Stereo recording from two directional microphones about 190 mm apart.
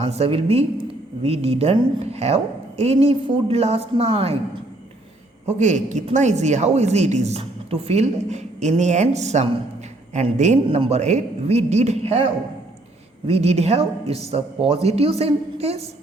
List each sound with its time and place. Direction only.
0.0 s a woman's voice: 35° right (ahead or behind)
5.5 s a woman's voice: 40° right (ahead or behind)